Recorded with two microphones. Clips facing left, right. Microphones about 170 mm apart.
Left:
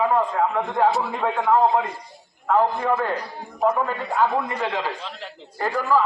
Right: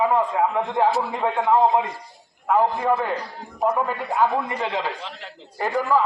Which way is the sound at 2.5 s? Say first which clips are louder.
Even; 15° right (ahead or behind).